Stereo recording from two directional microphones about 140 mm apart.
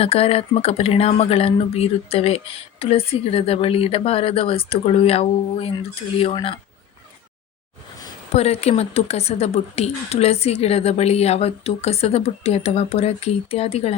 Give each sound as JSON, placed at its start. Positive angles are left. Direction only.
{"t": 0.0, "sound": "speech", "side_deg": 45}
{"t": 8.3, "sound": "speech", "side_deg": 50}